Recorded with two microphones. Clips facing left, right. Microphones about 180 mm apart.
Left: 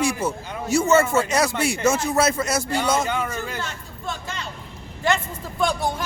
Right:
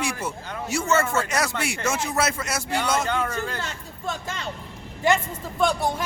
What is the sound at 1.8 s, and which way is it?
Speech, 45° left (ahead or behind).